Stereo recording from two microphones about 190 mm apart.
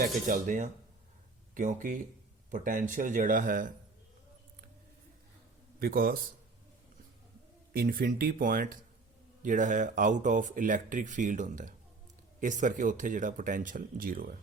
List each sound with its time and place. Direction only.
0.0 s speech: 45° right (ahead or behind)
5.8 s speech: 50° right (ahead or behind)
7.7 s speech: 50° right (ahead or behind)